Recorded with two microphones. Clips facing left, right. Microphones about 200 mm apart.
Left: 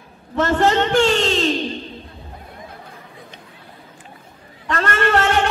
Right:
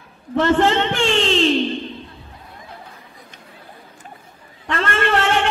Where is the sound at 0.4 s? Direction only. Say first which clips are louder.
Right 1 dB; 40° left (ahead or behind).